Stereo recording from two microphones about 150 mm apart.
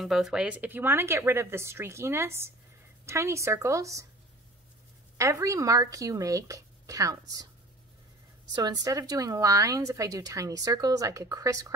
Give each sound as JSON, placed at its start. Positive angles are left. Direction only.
{"t": 0.0, "sound": "speech", "side_deg": 0}
{"t": 5.1, "sound": "speech", "side_deg": -20}
{"t": 8.5, "sound": "speech", "side_deg": -25}